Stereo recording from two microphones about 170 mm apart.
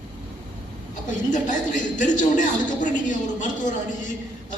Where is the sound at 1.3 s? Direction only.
50° left (ahead or behind).